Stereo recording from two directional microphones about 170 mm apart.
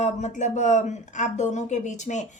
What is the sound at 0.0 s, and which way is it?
Speech, 45° left (ahead or behind).